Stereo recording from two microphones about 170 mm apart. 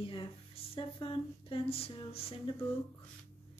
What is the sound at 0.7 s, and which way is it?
Speech, 30° left (ahead or behind).